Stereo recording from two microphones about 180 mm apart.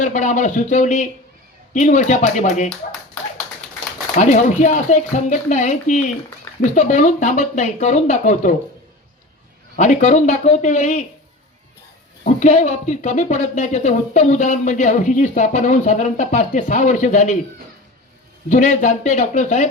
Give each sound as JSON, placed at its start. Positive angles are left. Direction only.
{"t": 0.0, "sound": "speech", "side_deg": 45}
{"t": 4.1, "sound": "speech", "side_deg": 45}
{"t": 9.7, "sound": "speech", "side_deg": 40}
{"t": 12.2, "sound": "speech", "side_deg": 40}
{"t": 18.4, "sound": "speech", "side_deg": 45}